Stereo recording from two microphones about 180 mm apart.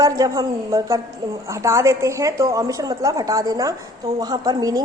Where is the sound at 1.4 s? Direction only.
15° right (ahead or behind).